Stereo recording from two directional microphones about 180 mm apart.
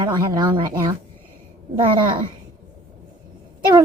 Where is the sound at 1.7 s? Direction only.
25° right (ahead or behind).